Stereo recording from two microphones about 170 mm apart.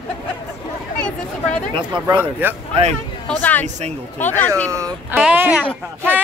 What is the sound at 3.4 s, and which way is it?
Speech, 10° left (ahead or behind).